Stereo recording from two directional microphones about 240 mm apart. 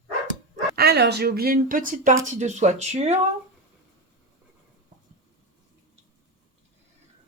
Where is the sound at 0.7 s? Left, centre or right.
Right.